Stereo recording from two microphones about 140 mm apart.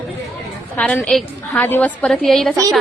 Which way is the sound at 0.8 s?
10° left (ahead or behind).